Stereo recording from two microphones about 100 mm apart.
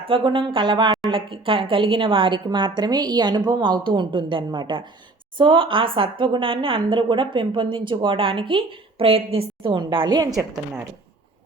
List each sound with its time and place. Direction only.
0.1 s a woman's voice: 60° right (ahead or behind); by 9.7 s 75° right (ahead or behind)
9.7 s a woman's voice: 50° right (ahead or behind)